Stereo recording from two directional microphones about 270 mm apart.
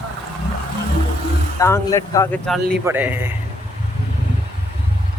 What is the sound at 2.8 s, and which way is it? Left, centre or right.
Speech, centre.